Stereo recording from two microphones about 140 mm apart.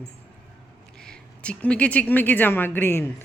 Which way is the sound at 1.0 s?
5° left (ahead or behind).